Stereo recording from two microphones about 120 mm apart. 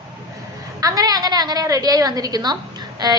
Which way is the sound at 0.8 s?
30° right (ahead or behind).